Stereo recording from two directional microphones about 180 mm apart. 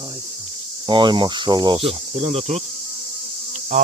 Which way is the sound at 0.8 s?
25° right (ahead or behind).